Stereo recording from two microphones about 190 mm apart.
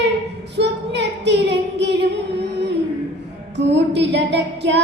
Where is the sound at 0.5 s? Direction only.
65° right (ahead or behind).